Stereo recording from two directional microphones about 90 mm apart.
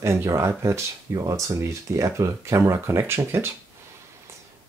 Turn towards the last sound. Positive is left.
turn(degrees=-30)  # may be behind; listen again after turning